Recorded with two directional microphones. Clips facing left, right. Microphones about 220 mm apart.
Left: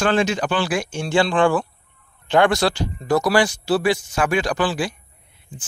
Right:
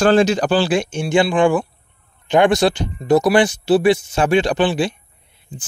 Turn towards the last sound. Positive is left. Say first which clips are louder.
# right 4 dB
turn(degrees=-25)  # may be behind; listen again after turning